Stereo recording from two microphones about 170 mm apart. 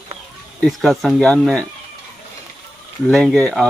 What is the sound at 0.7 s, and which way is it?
Speech, centre (ahead or behind).